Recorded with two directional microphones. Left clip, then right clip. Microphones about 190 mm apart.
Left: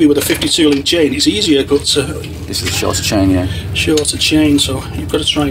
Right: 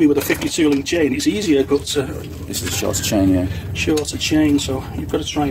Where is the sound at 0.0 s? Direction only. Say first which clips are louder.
Left 4 dB; 20° right (ahead or behind).